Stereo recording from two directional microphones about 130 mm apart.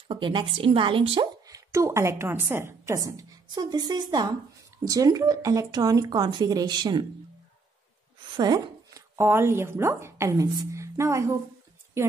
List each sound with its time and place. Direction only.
0.1 s a woman's voice: 40° right (ahead or behind)
1.5 s a woman's voice: 25° right (ahead or behind)
8.4 s chopping: 30° right (ahead or behind)
9.1 s a woman's voice: 20° right (ahead or behind)